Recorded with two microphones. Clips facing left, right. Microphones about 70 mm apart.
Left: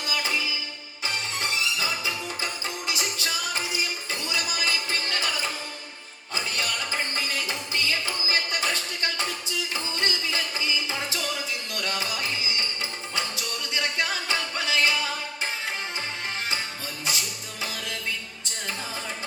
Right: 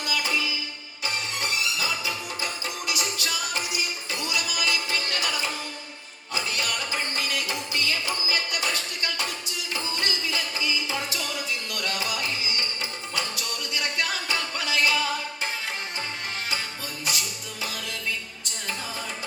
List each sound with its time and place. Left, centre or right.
0.0 s music: left
6.3 s music: left
17.1 s music: left